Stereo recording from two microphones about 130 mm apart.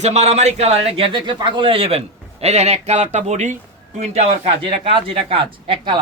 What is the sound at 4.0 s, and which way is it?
A man's voice, 55° right (ahead or behind).